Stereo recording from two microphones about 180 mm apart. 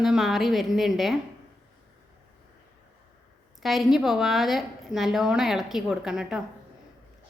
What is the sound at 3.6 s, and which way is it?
A woman's voice, centre (ahead or behind).